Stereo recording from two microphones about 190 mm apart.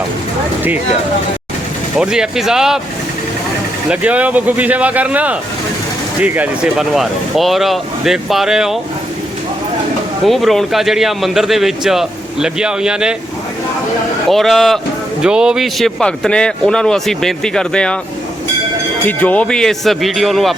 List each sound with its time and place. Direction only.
2.0 s speech: 5° right (ahead or behind)
3.8 s speech: 5° right (ahead or behind)
10.2 s speech: centre (ahead or behind)
14.3 s speech: centre (ahead or behind)
19.0 s speech: 10° left (ahead or behind)